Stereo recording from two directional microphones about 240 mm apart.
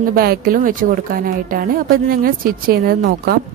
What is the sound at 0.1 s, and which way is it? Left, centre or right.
Speech, right.